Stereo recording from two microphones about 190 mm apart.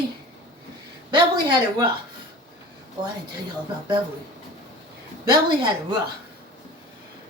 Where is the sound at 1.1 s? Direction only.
25° right (ahead or behind).